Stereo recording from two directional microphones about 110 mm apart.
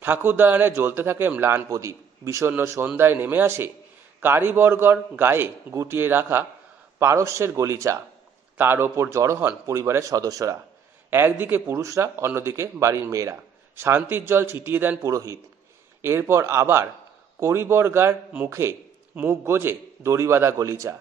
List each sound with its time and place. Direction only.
0.0 s a man's voice: 20° right (ahead or behind)
11.1 s a man's voice: 20° right (ahead or behind)